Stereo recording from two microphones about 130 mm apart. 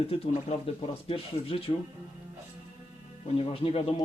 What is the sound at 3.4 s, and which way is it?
Speech, 45° left (ahead or behind).